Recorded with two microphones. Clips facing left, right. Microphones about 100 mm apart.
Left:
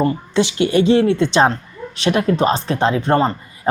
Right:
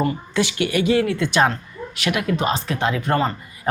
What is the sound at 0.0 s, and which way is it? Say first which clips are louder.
Speech: left 4 dB; 25° left (ahead or behind).